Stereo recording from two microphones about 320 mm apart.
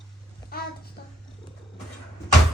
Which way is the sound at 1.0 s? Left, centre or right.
Left.